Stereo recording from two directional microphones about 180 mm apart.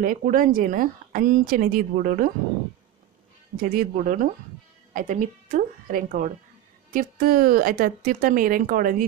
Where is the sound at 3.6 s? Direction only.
50° right (ahead or behind).